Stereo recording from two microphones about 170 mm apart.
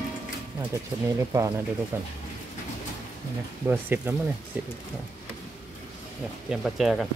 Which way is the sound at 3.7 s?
10° right (ahead or behind).